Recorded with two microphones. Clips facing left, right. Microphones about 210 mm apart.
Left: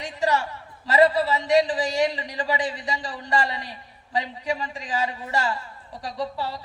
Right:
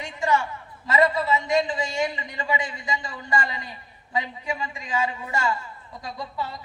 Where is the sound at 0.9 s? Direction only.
35° left (ahead or behind).